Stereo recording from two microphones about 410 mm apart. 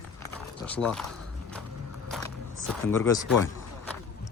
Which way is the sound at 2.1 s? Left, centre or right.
Centre.